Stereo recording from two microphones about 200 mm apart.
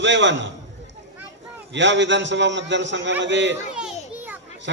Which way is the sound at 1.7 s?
65° right (ahead or behind).